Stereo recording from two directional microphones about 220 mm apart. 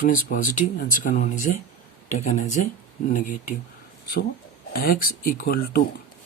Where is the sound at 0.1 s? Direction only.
35° left (ahead or behind).